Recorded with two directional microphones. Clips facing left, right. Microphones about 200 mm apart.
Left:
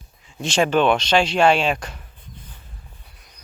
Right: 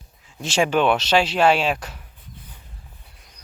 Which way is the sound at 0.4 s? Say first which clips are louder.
Left 1 dB; 10° right (ahead or behind).